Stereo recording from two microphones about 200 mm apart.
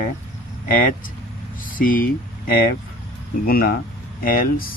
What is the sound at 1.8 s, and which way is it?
Speech, 45° left (ahead or behind).